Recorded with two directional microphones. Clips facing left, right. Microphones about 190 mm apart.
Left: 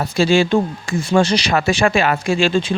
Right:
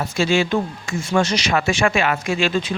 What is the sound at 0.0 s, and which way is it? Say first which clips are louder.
Speech: left 4 dB; 35° left (ahead or behind).